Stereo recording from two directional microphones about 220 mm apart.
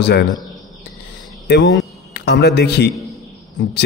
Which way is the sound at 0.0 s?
45° left (ahead or behind).